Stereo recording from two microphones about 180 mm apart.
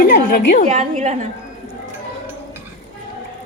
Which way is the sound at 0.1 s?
50° left (ahead or behind).